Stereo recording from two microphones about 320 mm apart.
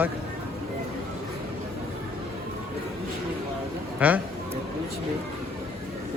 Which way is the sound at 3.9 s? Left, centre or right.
Centre.